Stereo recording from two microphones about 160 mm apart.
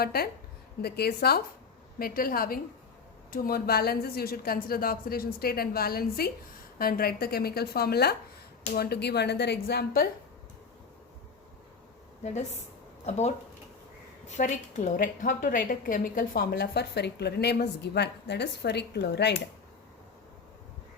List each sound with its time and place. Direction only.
0.0 s a woman's voice: 75° left (ahead or behind)
2.0 s a woman's voice: 65° left (ahead or behind)
12.2 s a woman's voice: 50° left (ahead or behind); by 19.4 s 90° left